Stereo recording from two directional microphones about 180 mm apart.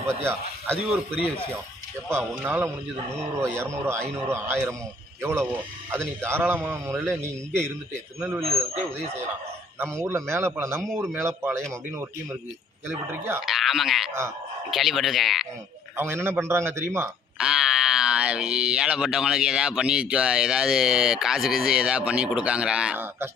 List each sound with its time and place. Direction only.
0.2 s a man's voice: 15° right (ahead or behind)
2.3 s a man's voice: 10° right (ahead or behind)
8.2 s a man's voice: 10° right (ahead or behind)
13.5 s speech: centre (ahead or behind)
16.0 s a man's voice: 15° right (ahead or behind)